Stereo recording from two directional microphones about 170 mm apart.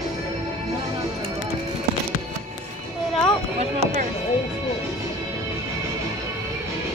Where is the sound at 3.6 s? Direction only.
35° right (ahead or behind).